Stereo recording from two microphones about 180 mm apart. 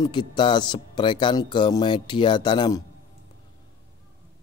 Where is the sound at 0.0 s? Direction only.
25° left (ahead or behind).